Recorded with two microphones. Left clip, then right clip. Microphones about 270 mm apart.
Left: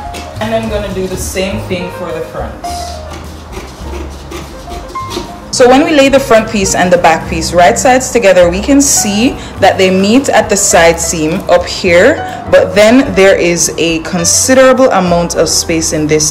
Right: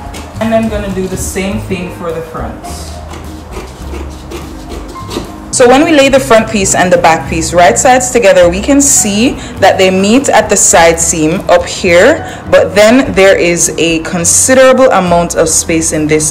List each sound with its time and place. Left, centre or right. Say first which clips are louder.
5.5 s speech: right 1 dB; centre